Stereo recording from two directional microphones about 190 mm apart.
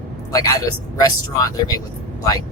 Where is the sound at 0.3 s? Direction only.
15° left (ahead or behind).